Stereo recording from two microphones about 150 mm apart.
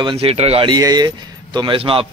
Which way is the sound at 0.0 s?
35° right (ahead or behind).